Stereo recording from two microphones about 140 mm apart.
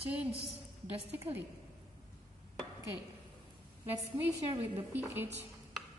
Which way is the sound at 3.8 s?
15° right (ahead or behind).